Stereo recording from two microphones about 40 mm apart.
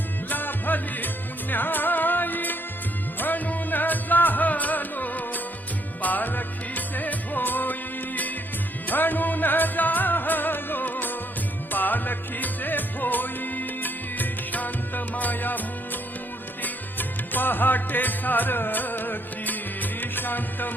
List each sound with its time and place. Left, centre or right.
0.3 s music: left